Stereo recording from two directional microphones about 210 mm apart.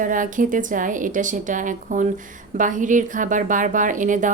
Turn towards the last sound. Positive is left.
turn(degrees=-35)  # may be behind; listen again after turning